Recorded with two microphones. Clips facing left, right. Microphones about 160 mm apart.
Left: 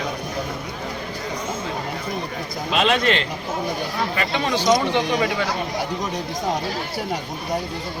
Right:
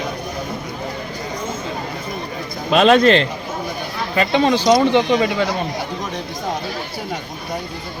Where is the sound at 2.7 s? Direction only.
40° right (ahead or behind).